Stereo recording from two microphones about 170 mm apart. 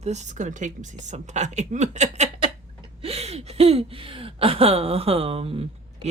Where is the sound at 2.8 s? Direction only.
35° right (ahead or behind).